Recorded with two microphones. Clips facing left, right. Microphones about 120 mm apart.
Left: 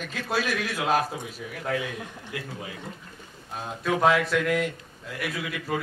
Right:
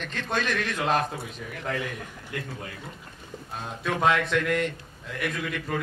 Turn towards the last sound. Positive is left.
turn(degrees=5)  # may be behind; listen again after turning